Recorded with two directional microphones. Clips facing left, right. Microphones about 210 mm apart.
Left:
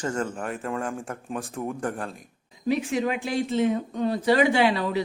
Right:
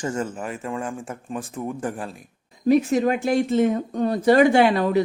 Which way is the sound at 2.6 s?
45° right (ahead or behind).